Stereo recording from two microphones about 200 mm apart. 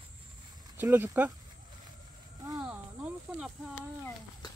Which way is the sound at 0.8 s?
10° right (ahead or behind).